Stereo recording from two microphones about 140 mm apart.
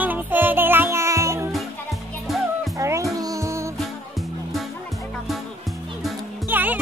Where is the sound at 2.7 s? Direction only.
20° right (ahead or behind).